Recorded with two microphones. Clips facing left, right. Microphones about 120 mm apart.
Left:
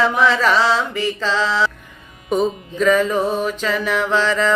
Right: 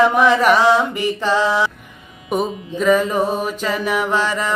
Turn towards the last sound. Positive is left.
turn(degrees=-15)  # may be behind; listen again after turning